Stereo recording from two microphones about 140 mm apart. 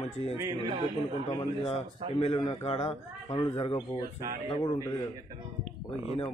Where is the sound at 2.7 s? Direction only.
50° left (ahead or behind).